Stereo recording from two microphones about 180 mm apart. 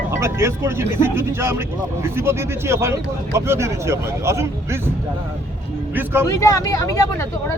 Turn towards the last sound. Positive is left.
turn(degrees=15)  # may be behind; listen again after turning